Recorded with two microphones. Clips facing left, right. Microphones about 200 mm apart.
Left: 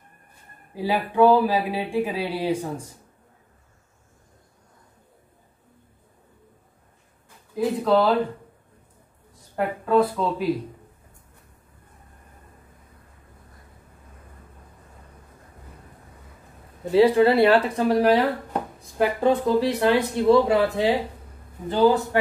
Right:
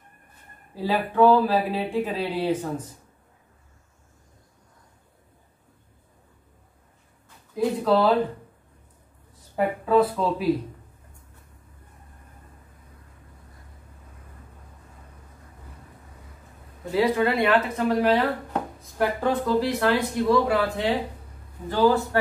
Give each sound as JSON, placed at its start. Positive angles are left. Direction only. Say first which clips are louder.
{"t": 0.7, "sound": "speech", "louder": "left 1 dB", "side_deg": 10}
{"t": 7.5, "sound": "speech", "louder": "left 1 dB", "side_deg": 0}
{"t": 9.6, "sound": "speech", "louder": "even", "side_deg": 0}
{"t": 16.9, "sound": "speech", "louder": "left 6 dB", "side_deg": 30}
{"t": 18.5, "sound": "speech", "louder": "even", "side_deg": 20}